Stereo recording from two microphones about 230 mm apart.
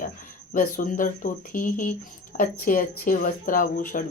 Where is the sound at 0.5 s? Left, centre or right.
Left.